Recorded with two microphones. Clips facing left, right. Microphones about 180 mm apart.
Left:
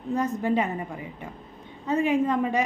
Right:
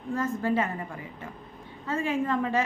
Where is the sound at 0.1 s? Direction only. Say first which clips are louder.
Left 2 dB; 20° left (ahead or behind).